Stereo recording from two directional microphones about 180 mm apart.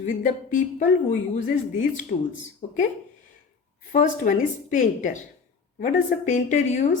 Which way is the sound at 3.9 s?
45° left (ahead or behind).